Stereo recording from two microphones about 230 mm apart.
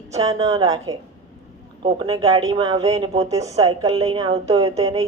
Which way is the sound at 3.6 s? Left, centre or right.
Centre.